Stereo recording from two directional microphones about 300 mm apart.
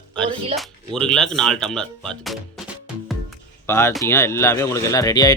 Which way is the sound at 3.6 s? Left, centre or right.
Centre.